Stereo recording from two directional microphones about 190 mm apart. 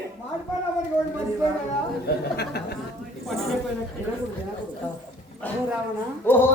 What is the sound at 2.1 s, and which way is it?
Speech, 55° left (ahead or behind).